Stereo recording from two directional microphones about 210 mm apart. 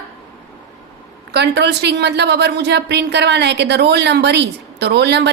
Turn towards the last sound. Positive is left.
turn(degrees=-55)  # may be behind; listen again after turning